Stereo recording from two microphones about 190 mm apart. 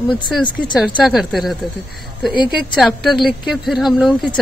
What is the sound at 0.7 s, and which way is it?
Speech, 5° right (ahead or behind).